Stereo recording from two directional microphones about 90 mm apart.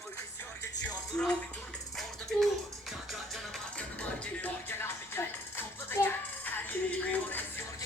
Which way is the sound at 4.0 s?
20° left (ahead or behind).